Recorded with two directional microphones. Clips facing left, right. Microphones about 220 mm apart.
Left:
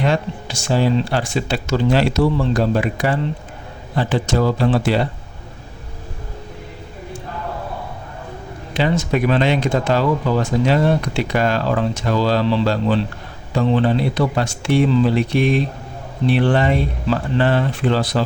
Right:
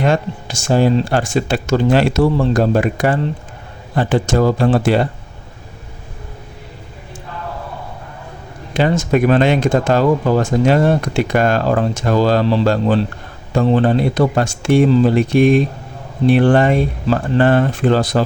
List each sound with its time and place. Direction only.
0.0 s speech: 45° right (ahead or behind)
8.7 s speech: 50° right (ahead or behind)